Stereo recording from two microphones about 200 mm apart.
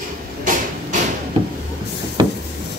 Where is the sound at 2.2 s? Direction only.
20° right (ahead or behind).